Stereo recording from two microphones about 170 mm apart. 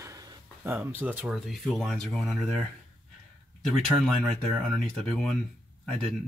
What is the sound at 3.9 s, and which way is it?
Speech, 5° left (ahead or behind).